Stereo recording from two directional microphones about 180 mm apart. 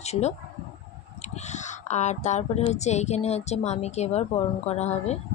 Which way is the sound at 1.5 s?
40° left (ahead or behind).